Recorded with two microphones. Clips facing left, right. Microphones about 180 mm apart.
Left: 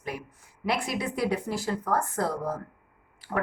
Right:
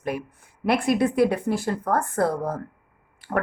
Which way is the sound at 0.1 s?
55° right (ahead or behind).